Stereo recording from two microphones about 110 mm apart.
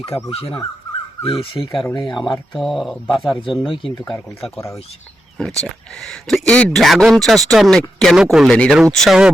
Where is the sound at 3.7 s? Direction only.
50° left (ahead or behind).